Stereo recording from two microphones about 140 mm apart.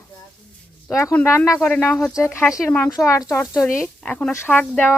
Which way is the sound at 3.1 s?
20° left (ahead or behind).